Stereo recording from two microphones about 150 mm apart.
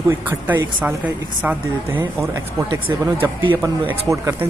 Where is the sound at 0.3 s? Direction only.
10° right (ahead or behind).